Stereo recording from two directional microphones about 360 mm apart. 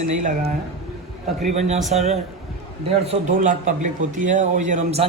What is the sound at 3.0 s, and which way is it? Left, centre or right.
A man's voice, centre.